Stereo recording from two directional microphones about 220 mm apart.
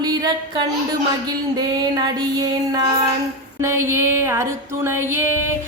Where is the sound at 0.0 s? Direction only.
20° right (ahead or behind).